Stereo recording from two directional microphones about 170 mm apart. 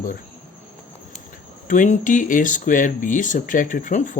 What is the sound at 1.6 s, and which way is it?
Speech, 50° left (ahead or behind).